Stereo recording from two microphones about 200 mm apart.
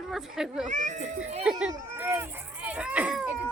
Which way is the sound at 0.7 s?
40° right (ahead or behind).